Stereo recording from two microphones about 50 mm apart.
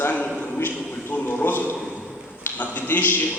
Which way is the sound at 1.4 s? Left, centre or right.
Left.